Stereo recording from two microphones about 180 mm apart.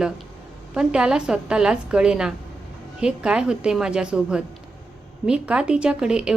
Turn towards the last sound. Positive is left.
turn(degrees=-5)  # may be behind; listen again after turning